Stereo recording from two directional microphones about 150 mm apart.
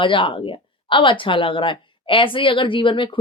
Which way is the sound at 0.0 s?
35° left (ahead or behind).